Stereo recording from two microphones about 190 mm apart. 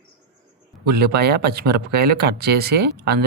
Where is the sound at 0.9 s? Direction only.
60° right (ahead or behind).